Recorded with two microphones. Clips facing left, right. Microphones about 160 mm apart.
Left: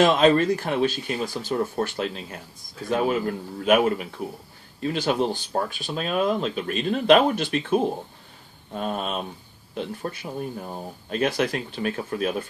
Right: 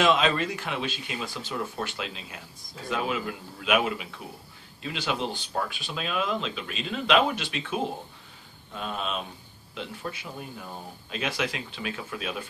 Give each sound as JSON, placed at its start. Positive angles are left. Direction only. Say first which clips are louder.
{"t": 0.0, "sound": "speech", "louder": "left 6 dB", "side_deg": 45}